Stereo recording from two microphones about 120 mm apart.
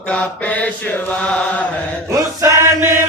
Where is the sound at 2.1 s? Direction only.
25° right (ahead or behind).